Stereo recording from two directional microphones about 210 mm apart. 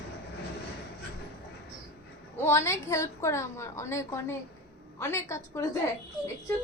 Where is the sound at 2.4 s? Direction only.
10° left (ahead or behind).